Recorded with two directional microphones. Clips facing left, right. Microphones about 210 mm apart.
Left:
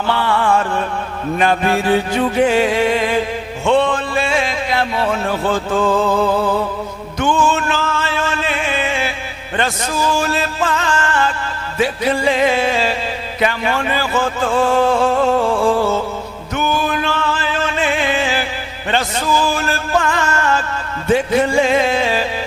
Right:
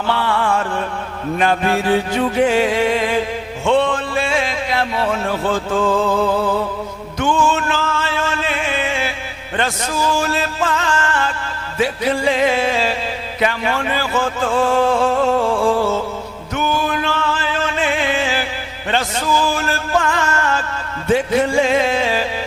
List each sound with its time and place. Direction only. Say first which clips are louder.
0.1 s music: left 2 dB; 15° left (ahead or behind)
3.7 s a sound: left 1 dB; 20° left (ahead or behind)
6.1 s speech: left 1 dB; 30° left (ahead or behind)
7.2 s music: left 1 dB; 15° left (ahead or behind)
10.2 s music: left 1 dB; 15° left (ahead or behind)
13.4 s speech: left 1 dB; 15° left (ahead or behind)
16.6 s music: left 1 dB; 15° left (ahead or behind)